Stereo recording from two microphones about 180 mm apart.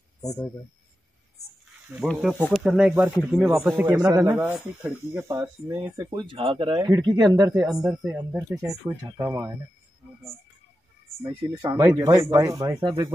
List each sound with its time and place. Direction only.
0.2 s speech: 20° left (ahead or behind)
2.0 s speech: 5° right (ahead or behind)
3.9 s speech: 20° right (ahead or behind)
5.3 s speech: 15° right (ahead or behind)
6.0 s speech: 25° right (ahead or behind)
8.1 s speech: 5° right (ahead or behind)
11.2 s speech: 20° right (ahead or behind)